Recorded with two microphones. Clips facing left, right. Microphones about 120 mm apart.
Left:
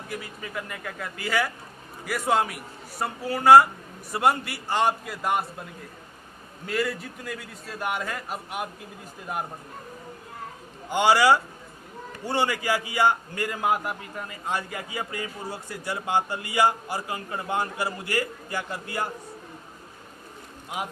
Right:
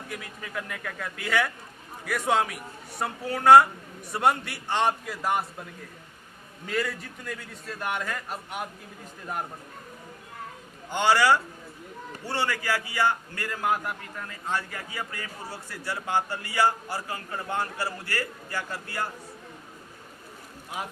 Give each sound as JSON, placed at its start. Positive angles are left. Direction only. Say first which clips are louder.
{"t": 0.1, "sound": "a man's voice", "louder": "left 3 dB", "side_deg": 5}
{"t": 6.7, "sound": "a man's voice", "louder": "left 2 dB", "side_deg": 0}
{"t": 10.8, "sound": "a man's voice", "louder": "left 2 dB", "side_deg": 15}